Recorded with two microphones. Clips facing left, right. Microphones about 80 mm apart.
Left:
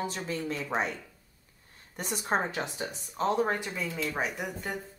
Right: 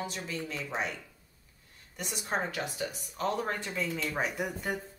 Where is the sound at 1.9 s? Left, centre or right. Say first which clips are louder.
Left 4 dB; left.